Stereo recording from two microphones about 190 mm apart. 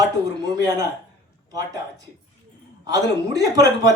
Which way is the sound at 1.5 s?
20° right (ahead or behind).